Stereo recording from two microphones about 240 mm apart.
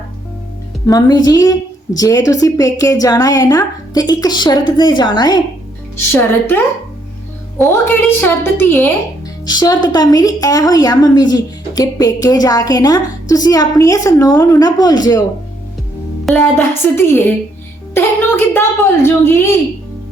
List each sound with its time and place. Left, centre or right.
0.9 s a woman's voice: centre
7.6 s a woman's voice: centre
16.2 s a woman's voice: centre